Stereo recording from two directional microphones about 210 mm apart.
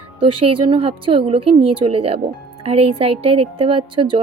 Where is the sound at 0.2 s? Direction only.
25° right (ahead or behind).